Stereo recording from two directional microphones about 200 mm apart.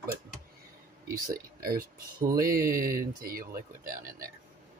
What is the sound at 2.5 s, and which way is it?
Speech, 45° right (ahead or behind).